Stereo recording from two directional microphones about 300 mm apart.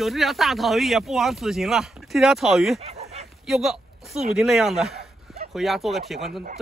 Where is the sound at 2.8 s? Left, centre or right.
Right.